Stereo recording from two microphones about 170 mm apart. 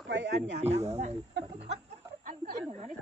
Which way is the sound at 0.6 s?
40° right (ahead or behind).